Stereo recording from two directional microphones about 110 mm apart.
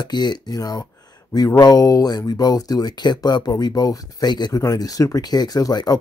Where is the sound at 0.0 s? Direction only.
40° left (ahead or behind).